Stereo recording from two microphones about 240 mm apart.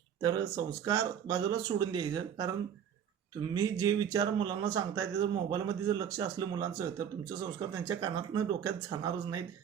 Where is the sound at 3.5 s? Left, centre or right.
Centre.